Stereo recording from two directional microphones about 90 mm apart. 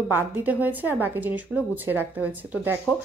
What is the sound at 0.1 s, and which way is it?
Speech, 20° right (ahead or behind).